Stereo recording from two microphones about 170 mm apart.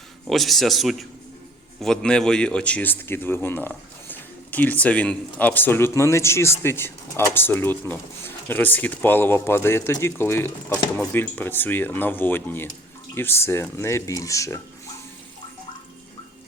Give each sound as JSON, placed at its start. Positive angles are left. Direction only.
{"t": 0.3, "sound": "a man's voice", "side_deg": 0}